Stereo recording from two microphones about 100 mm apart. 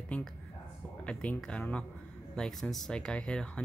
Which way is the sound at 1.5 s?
10° left (ahead or behind).